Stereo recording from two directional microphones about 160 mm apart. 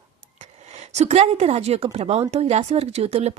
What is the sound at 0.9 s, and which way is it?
A woman's voice, 40° right (ahead or behind).